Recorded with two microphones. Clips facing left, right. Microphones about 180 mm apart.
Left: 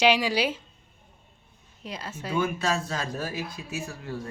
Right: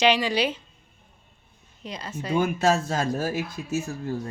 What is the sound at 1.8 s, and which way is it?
Speech, 5° left (ahead or behind).